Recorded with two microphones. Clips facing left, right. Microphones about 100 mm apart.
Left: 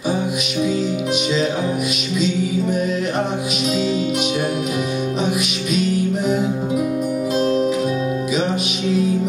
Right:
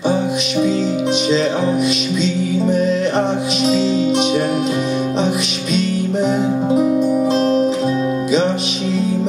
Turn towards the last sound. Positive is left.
turn(degrees=-30)  # may be behind; listen again after turning